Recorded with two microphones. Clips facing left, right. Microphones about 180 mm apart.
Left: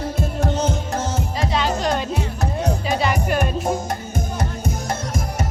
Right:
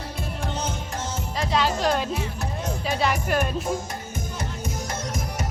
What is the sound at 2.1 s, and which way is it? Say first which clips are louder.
Music: left 5 dB; 70° left (ahead or behind).